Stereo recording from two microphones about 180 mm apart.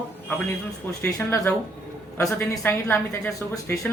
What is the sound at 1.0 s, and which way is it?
Speech, 10° left (ahead or behind).